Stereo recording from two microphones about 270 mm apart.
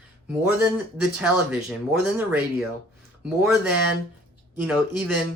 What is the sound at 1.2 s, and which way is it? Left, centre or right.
Speech, centre.